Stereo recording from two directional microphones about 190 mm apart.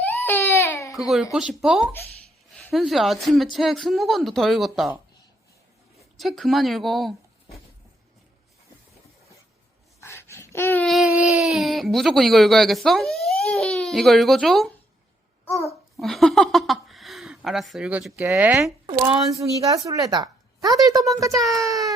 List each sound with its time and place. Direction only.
0.0 s baby cry: 10° left (ahead or behind)
0.9 s a woman's voice: centre (ahead or behind)
1.9 s a woman's voice: 10° left (ahead or behind)
6.1 s a woman's voice: centre (ahead or behind)
10.0 s a sound: 15° left (ahead or behind)
16.0 s speech: centre (ahead or behind)
18.9 s a woman's voice: 25° right (ahead or behind)